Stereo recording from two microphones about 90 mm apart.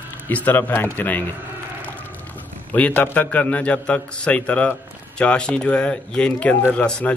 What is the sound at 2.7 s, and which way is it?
A man's voice, 20° left (ahead or behind).